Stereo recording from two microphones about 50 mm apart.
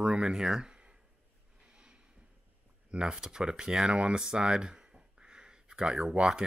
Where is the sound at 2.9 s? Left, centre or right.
Centre.